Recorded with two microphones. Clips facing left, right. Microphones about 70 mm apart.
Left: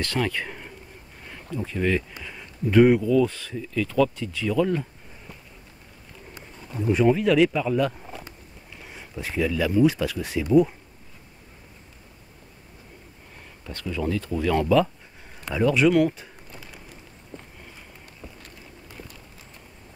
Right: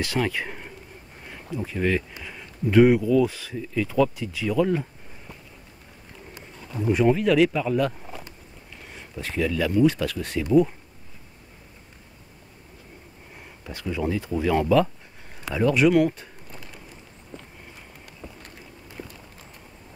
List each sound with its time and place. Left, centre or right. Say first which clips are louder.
0.0 s speech: right 1 dB; centre
6.8 s speech: even; centre
13.4 s speech: even; centre
15.4 s a sound: even; centre
18.2 s run: right 2 dB; centre